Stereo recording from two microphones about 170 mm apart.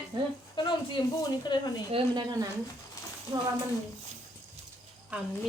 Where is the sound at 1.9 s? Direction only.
25° right (ahead or behind).